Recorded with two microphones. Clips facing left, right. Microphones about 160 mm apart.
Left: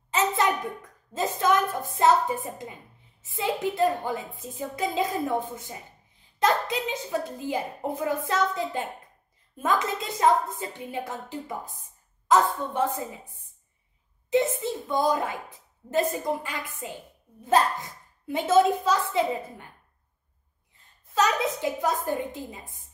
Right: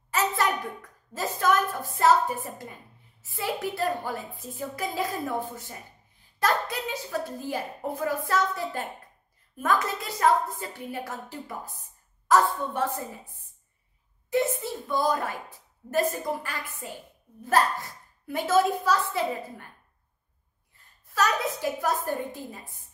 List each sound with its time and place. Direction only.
0.1 s hands: 20° left (ahead or behind)
1.1 s a woman's voice: 20° left (ahead or behind)
6.4 s a sound: 20° left (ahead or behind)
6.9 s a woman's voice: 20° left (ahead or behind)
14.3 s a woman's voice: 20° left (ahead or behind)
21.1 s a woman's voice: 20° left (ahead or behind)